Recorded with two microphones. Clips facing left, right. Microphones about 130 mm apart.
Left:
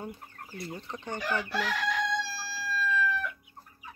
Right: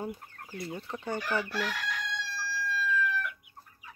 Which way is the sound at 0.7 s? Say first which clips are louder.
Right 3 dB; 5° right (ahead or behind).